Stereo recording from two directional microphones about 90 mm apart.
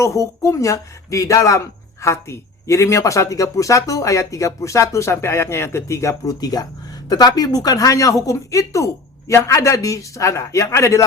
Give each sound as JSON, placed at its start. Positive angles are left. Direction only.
{"t": 0.0, "sound": "speech", "side_deg": 35}